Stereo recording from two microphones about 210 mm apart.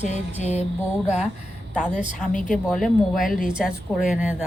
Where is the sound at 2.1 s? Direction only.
40° left (ahead or behind).